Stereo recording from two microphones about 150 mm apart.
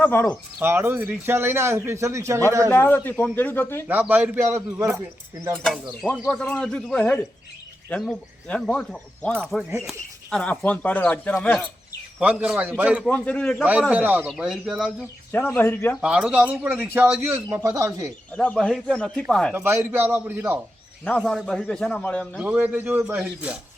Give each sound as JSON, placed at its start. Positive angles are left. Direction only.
{"t": 0.0, "sound": "speech", "side_deg": 10}
{"t": 0.6, "sound": "a man's voice", "side_deg": -15}
{"t": 2.6, "sound": "speech", "side_deg": 15}
{"t": 3.8, "sound": "a man's voice", "side_deg": -10}
{"t": 6.1, "sound": "a man's voice", "side_deg": 0}
{"t": 12.2, "sound": "a man's voice", "side_deg": -5}
{"t": 13.1, "sound": "speech", "side_deg": 10}
{"t": 13.7, "sound": "a man's voice", "side_deg": -10}
{"t": 15.3, "sound": "speech", "side_deg": 15}
{"t": 16.0, "sound": "a man's voice", "side_deg": -5}
{"t": 18.3, "sound": "a man's voice", "side_deg": 5}
{"t": 19.5, "sound": "a man's voice", "side_deg": -15}
{"t": 21.2, "sound": "a man's voice", "side_deg": 0}
{"t": 22.4, "sound": "a man's voice", "side_deg": -10}